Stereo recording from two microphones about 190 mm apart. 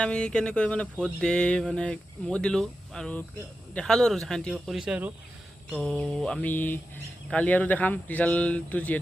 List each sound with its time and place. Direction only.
0.0 s mantra: 5° left (ahead or behind)
5.8 s speech: 5° left (ahead or behind)